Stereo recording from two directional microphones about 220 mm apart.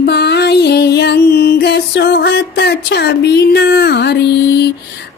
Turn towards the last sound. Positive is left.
turn(degrees=50)  # may be behind; listen again after turning